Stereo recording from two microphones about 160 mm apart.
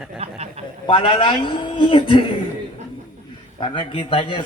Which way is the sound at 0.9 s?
30° left (ahead or behind).